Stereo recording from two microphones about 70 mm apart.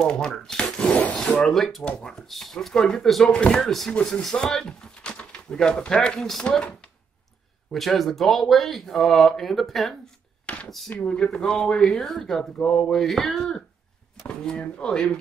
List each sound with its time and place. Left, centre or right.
0.0 s speech: centre
1.9 s speech: centre
2.2 s speech: centre
7.7 s speech: centre
10.4 s a sound: centre
11.0 s speech: centre
14.2 s speech: centre